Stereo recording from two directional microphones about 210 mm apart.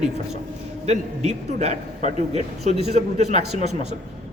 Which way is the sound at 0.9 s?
30° right (ahead or behind).